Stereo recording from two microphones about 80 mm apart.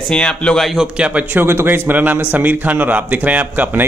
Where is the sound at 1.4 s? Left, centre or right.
Right.